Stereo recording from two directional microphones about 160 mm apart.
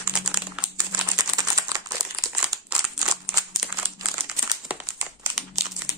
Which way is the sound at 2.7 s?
5° right (ahead or behind).